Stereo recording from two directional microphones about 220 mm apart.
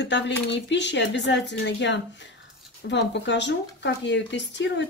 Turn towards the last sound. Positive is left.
turn(degrees=55)  # may be behind; listen again after turning